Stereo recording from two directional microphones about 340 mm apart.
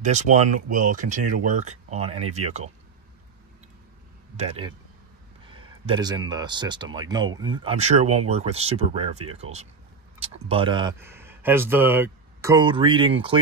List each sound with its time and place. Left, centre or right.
0.0 s speech: right
4.4 s speech: centre